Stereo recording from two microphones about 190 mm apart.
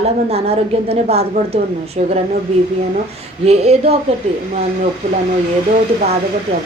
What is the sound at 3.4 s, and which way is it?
Speech, 35° right (ahead or behind).